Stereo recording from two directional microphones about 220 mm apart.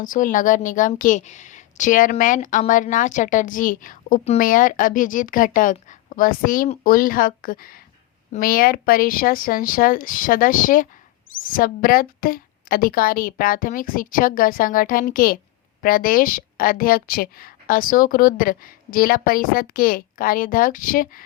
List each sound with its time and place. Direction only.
0.0 s a woman's voice: 35° left (ahead or behind)